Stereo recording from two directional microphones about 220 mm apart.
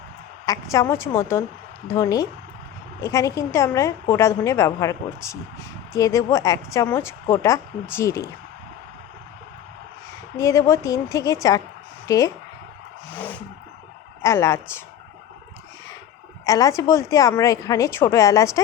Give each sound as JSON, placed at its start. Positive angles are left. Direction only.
{"t": 0.4, "sound": "a woman's voice", "side_deg": 15}
{"t": 10.3, "sound": "a woman's voice", "side_deg": 15}
{"t": 13.1, "sound": "roaring cats", "side_deg": 5}
{"t": 14.2, "sound": "a woman's voice", "side_deg": 10}
{"t": 16.5, "sound": "a woman's voice", "side_deg": 15}